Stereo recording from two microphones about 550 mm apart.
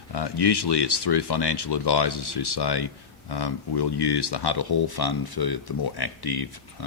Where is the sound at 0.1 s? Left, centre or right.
Left.